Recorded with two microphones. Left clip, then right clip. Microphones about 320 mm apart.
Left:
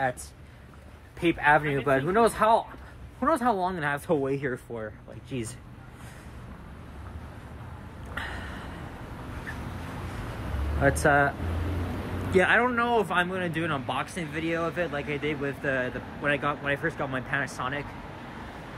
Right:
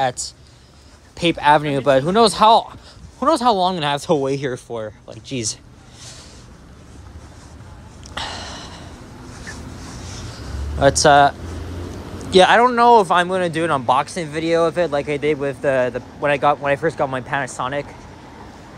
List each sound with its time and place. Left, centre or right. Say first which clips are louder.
1.2 s speech: right 7 dB; centre
8.1 s snort: right 8 dB; centre
10.8 s speech: right 11 dB; centre
12.4 s speech: right 11 dB; centre